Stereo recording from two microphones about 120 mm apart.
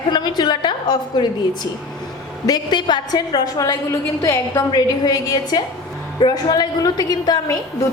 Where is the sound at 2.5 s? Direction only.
40° left (ahead or behind).